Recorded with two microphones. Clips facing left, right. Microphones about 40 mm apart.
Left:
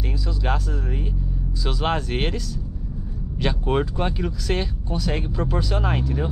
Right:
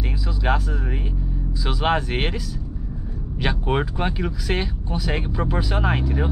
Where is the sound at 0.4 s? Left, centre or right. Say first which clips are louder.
Right 4 dB; centre.